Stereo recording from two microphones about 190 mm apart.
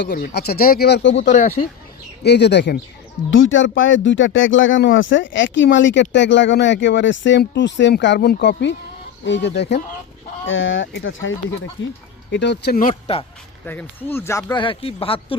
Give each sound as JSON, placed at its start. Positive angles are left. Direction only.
{"t": 0.0, "sound": "speech", "side_deg": 55}
{"t": 1.2, "sound": "speech", "side_deg": 40}
{"t": 2.2, "sound": "speech", "side_deg": 60}
{"t": 3.2, "sound": "speech", "side_deg": 85}
{"t": 10.4, "sound": "speech", "side_deg": 90}
{"t": 11.8, "sound": "speech", "side_deg": 75}
{"t": 12.3, "sound": "speech", "side_deg": 65}
{"t": 12.8, "sound": "speech", "side_deg": 35}
{"t": 13.7, "sound": "speech", "side_deg": 10}